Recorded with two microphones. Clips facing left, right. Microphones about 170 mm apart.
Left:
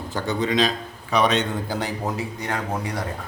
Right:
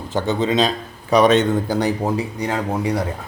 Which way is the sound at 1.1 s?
45° right (ahead or behind).